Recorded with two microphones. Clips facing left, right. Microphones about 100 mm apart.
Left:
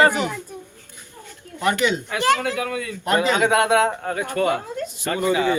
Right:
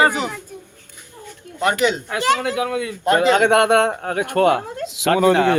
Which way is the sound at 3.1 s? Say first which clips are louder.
Right 3 dB; 60° right (ahead or behind).